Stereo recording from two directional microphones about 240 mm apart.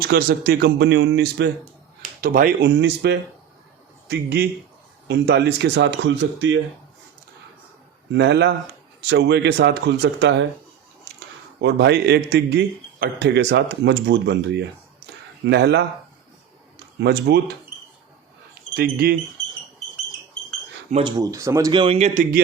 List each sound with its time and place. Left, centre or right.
0.1 s a man's voice: right
8.1 s a man's voice: right
11.6 s a man's voice: right
17.0 s a man's voice: right
18.7 s speech: right
20.9 s speech: centre; by 22.4 s right